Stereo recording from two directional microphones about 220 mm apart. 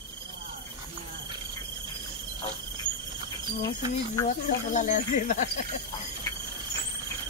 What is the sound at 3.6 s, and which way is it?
Speech, 15° left (ahead or behind).